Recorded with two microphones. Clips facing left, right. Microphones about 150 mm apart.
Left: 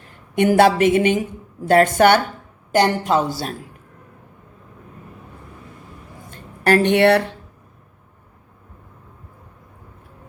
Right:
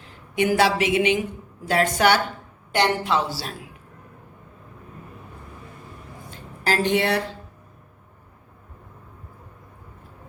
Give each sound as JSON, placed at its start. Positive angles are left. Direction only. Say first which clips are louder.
{"t": 0.3, "sound": "a woman's voice", "louder": "left 6 dB", "side_deg": 55}
{"t": 6.3, "sound": "a woman's voice", "louder": "left 8 dB", "side_deg": 65}